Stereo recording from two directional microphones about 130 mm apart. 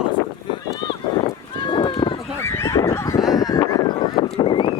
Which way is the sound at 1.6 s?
40° left (ahead or behind).